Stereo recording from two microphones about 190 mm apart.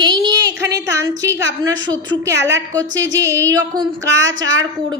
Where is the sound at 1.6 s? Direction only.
20° right (ahead or behind).